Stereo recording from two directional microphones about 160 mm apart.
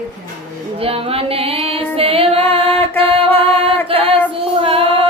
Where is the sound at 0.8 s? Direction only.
35° right (ahead or behind).